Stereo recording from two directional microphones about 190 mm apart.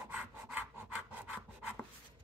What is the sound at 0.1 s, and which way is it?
Wood, 10° right (ahead or behind).